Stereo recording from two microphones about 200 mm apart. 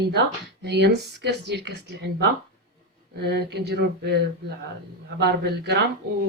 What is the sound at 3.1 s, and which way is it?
Speech, 55° right (ahead or behind).